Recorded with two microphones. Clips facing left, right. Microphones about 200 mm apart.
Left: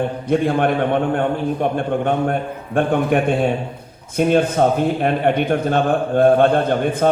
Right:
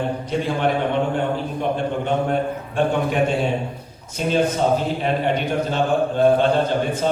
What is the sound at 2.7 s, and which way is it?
A man's voice, 55° left (ahead or behind).